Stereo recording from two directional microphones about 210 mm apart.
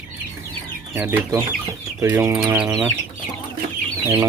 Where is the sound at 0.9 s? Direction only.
10° right (ahead or behind).